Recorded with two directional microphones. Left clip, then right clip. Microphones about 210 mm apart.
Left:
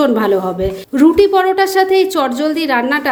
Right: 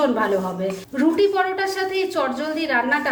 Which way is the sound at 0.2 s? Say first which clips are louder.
Left 7 dB; 50° left (ahead or behind).